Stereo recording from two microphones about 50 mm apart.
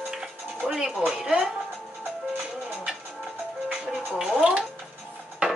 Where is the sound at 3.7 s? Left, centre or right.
Centre.